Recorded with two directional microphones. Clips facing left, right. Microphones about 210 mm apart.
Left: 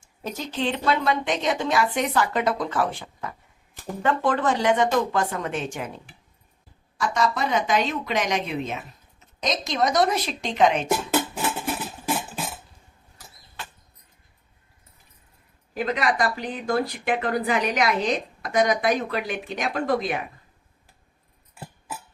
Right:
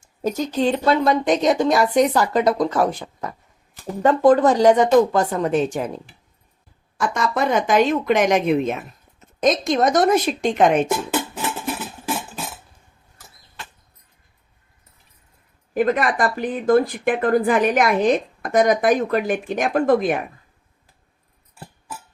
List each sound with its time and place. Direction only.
0.0 s a woman's voice: 40° right (ahead or behind)
7.0 s speech: 50° right (ahead or behind)
15.7 s speech: 50° right (ahead or behind)